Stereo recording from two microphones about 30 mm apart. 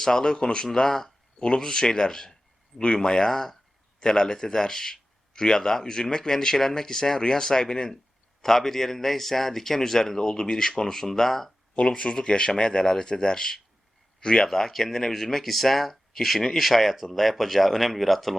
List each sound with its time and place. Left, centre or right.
0.0 s speech: left
0.7 s a man's voice: centre
8.4 s a man's voice: centre
11.8 s speech: left
14.4 s a man's voice: centre